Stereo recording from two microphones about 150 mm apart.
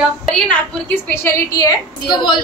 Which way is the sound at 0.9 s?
15° left (ahead or behind).